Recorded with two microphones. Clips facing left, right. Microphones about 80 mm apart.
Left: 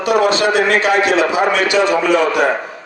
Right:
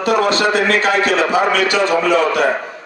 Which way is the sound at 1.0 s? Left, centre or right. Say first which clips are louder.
Left 1 dB; right.